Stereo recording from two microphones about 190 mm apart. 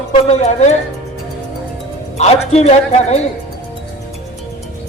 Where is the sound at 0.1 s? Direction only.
35° left (ahead or behind).